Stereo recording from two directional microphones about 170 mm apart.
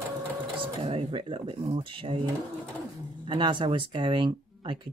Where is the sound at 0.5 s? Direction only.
35° right (ahead or behind).